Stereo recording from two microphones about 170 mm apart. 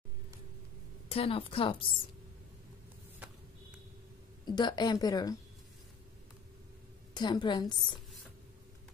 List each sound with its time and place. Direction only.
1.1 s a woman's voice: 35° left (ahead or behind)
4.5 s a woman's voice: 25° left (ahead or behind)
7.2 s a woman's voice: 25° left (ahead or behind)